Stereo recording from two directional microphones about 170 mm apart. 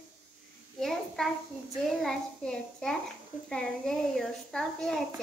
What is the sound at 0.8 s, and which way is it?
A child's voice, centre (ahead or behind).